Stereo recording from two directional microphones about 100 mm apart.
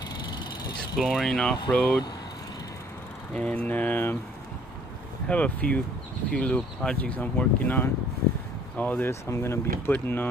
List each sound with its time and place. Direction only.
0.9 s speech: 5° right (ahead or behind)
1.7 s speech: 15° left (ahead or behind)
3.3 s speech: 10° left (ahead or behind)
5.3 s speech: 15° left (ahead or behind)
9.3 s speech: 25° left (ahead or behind)